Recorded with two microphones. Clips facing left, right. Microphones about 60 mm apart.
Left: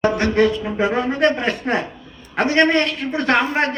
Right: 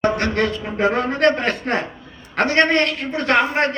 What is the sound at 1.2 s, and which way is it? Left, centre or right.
Speech, right.